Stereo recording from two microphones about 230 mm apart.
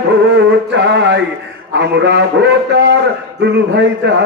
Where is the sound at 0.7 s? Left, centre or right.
Right.